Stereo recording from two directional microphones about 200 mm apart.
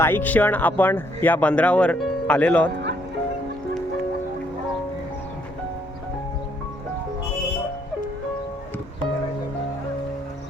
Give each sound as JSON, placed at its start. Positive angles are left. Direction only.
{"t": 0.0, "sound": "speech", "side_deg": 10}